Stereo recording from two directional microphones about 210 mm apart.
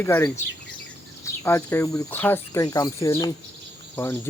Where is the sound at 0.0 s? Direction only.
10° left (ahead or behind).